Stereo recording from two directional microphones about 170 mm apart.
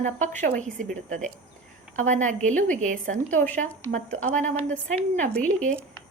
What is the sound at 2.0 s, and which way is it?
A woman's voice, 45° right (ahead or behind).